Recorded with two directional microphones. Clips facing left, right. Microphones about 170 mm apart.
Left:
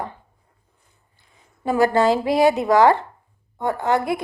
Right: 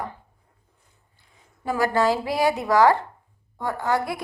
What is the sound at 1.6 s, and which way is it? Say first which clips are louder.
A woman's voice: left 4 dB; 25° left (ahead or behind).